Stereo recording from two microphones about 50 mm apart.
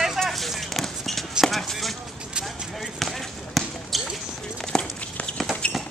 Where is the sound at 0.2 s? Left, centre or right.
Centre.